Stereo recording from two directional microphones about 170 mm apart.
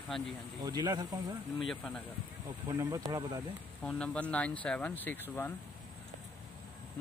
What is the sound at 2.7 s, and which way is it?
Speech, 20° right (ahead or behind).